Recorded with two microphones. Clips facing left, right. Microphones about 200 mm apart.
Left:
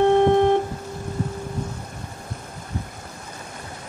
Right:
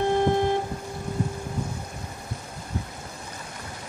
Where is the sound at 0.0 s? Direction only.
65° left (ahead or behind).